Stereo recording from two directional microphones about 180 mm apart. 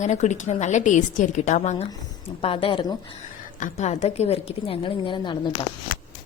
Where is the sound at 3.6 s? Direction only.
40° left (ahead or behind).